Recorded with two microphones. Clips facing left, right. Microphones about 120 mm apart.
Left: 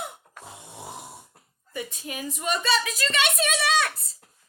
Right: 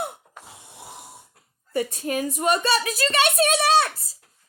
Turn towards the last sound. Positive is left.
turn(degrees=-35)  # may be behind; listen again after turning